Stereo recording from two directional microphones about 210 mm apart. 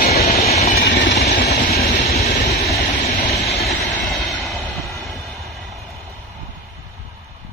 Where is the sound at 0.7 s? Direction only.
50° left (ahead or behind).